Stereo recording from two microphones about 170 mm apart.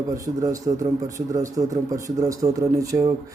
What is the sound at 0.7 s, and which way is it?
Speech, 30° right (ahead or behind).